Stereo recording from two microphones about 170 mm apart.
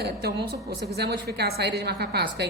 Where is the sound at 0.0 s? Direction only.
70° right (ahead or behind).